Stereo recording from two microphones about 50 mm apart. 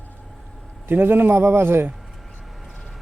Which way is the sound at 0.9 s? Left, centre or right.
Right.